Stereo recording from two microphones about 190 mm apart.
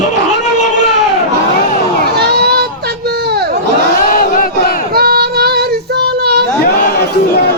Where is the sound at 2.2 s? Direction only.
60° right (ahead or behind).